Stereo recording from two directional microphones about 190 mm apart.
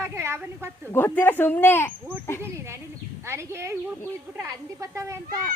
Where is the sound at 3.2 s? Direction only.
15° right (ahead or behind).